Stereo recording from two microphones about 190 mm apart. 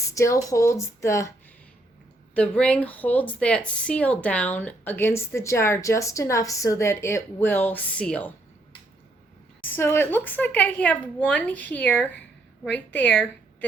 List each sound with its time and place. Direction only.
0.1 s speech: 15° left (ahead or behind)
2.3 s speech: 5° left (ahead or behind)
9.6 s a woman's voice: 10° left (ahead or behind)